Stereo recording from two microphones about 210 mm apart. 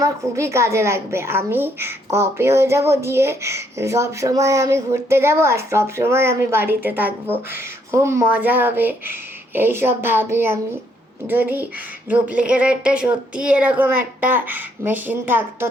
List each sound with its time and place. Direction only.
0.0 s a woman's voice: 15° right (ahead or behind)